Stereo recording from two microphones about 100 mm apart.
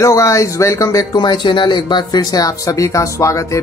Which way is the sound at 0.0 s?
30° left (ahead or behind).